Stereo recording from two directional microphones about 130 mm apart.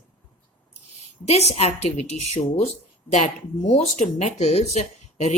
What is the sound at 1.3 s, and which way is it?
A woman's voice, 55° left (ahead or behind).